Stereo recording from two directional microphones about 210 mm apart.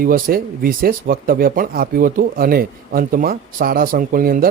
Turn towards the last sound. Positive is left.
turn(degrees=-45)  # may be behind; listen again after turning